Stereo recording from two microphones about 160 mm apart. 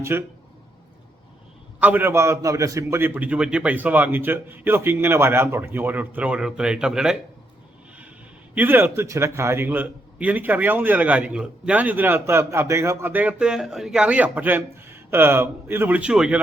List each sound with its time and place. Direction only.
0.0 s a man's voice: 15° right (ahead or behind)
1.8 s a man's voice: 10° right (ahead or behind)
8.5 s a man's voice: 15° right (ahead or behind)